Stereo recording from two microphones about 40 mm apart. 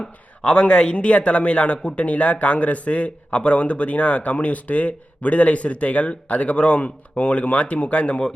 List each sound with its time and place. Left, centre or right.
0.4 s speech: left